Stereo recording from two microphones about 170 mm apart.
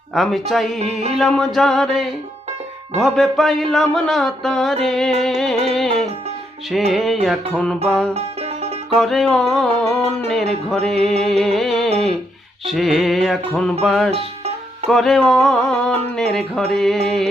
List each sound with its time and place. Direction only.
0.1 s music: centre (ahead or behind)
0.8 s music: 40° right (ahead or behind)
1.2 s music: centre (ahead or behind)
6.9 s music: centre (ahead or behind)
8.1 s music: 40° right (ahead or behind)
9.0 s music: centre (ahead or behind)
14.1 s music: 40° right (ahead or behind)
14.8 s music: centre (ahead or behind)